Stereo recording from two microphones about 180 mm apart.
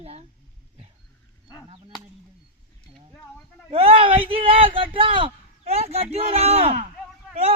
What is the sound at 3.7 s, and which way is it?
Speech, 30° right (ahead or behind).